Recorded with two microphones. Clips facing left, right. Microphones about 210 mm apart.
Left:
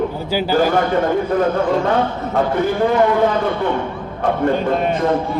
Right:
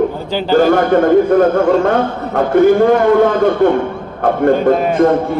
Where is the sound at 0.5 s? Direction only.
50° right (ahead or behind).